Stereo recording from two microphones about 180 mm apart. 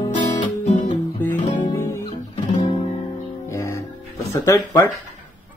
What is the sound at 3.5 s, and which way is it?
Music, 15° left (ahead or behind).